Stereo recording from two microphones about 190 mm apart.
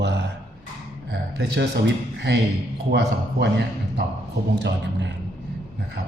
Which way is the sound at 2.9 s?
65° right (ahead or behind).